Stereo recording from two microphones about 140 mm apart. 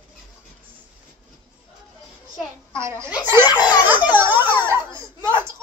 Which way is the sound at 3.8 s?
15° right (ahead or behind).